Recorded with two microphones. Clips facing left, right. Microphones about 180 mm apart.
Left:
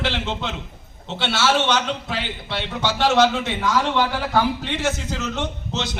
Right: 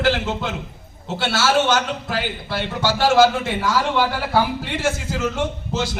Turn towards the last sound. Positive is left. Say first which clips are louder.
# right 3 dB
turn(degrees=-5)  # may be behind; listen again after turning